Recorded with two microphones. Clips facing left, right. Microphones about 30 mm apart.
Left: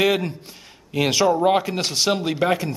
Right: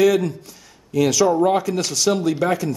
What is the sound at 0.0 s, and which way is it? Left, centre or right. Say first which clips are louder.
Speech: right 4 dB; left.